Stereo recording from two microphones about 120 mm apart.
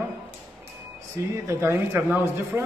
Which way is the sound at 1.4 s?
20° right (ahead or behind).